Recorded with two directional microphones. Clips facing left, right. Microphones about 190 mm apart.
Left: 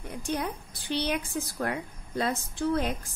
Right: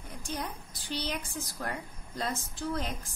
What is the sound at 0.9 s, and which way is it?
A woman's voice, 65° left (ahead or behind).